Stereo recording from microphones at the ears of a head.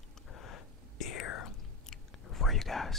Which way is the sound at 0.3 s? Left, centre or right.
Left.